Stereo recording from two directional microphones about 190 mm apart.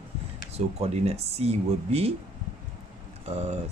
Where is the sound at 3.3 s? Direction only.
35° right (ahead or behind).